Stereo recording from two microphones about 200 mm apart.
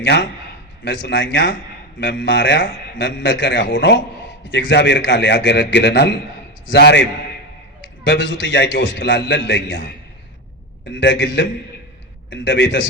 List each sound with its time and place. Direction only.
0.0 s a man's voice: 60° left (ahead or behind)
10.8 s a man's voice: 60° left (ahead or behind)